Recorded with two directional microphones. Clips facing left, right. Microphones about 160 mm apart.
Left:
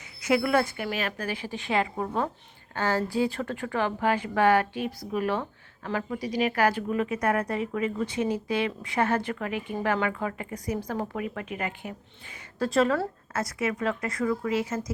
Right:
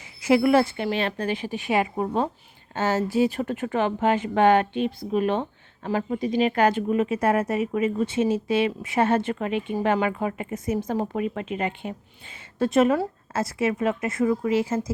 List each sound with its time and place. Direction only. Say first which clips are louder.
0.2 s speech: right 5 dB; 25° right (ahead or behind)